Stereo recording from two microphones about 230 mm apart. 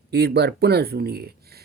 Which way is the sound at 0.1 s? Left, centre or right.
Right.